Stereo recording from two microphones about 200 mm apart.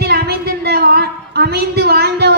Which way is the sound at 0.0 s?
50° right (ahead or behind).